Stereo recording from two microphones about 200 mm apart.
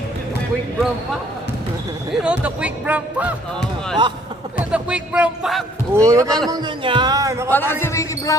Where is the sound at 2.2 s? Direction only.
5° right (ahead or behind).